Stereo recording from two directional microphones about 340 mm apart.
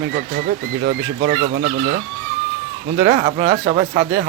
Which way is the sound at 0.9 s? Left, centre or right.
Right.